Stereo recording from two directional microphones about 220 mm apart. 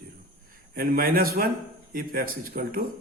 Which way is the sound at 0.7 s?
40° right (ahead or behind).